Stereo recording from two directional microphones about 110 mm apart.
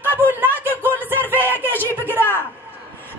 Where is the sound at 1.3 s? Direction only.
20° left (ahead or behind).